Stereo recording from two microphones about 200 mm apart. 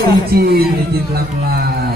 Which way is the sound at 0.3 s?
50° right (ahead or behind).